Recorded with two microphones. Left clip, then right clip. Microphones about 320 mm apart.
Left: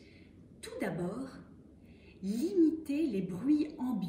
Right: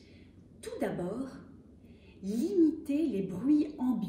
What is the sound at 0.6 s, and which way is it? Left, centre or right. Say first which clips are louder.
Speech: right 3 dB; centre.